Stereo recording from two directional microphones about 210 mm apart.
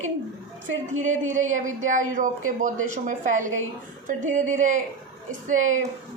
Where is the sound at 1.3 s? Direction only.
35° right (ahead or behind).